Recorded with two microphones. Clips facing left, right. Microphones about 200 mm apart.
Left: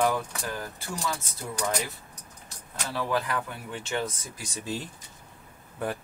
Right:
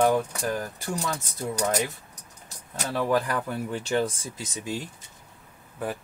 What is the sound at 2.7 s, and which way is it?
Speech, 40° right (ahead or behind).